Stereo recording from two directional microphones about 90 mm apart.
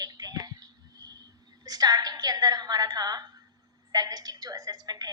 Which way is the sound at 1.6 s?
45° right (ahead or behind).